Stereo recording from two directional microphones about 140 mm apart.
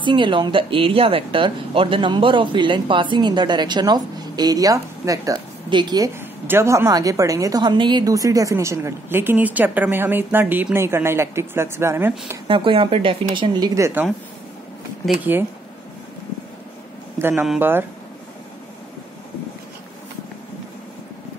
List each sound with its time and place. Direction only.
0.0 s speech: 35° right (ahead or behind)
6.4 s a woman's voice: 15° right (ahead or behind)
12.4 s speech: 40° right (ahead or behind)
13.7 s a woman's voice: 20° right (ahead or behind)
17.2 s speech: 15° right (ahead or behind)